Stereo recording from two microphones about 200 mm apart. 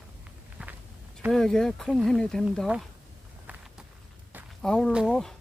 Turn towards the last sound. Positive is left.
turn(degrees=0)  # may be behind; listen again after turning